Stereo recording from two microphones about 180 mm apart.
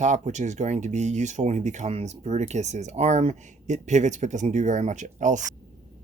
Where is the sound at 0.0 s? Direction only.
40° right (ahead or behind).